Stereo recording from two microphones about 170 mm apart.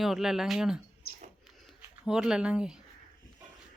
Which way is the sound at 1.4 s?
Centre (ahead or behind).